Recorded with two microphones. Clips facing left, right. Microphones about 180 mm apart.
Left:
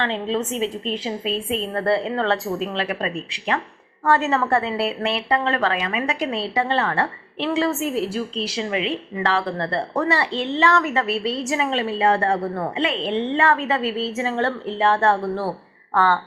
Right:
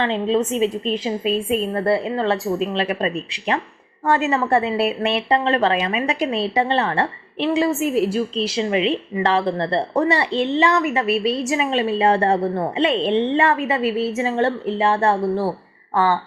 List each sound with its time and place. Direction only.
0.0 s a woman's voice: 15° right (ahead or behind)
2.6 s a woman's voice: 20° right (ahead or behind)